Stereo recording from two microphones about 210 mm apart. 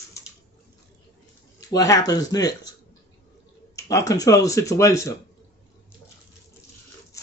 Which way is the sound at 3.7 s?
15° left (ahead or behind).